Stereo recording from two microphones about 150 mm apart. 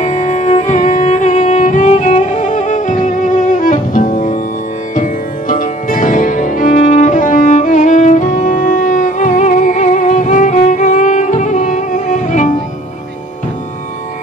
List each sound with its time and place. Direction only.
0.2 s music: 55° left (ahead or behind)
0.8 s music: 35° left (ahead or behind)
1.1 s music: 55° left (ahead or behind)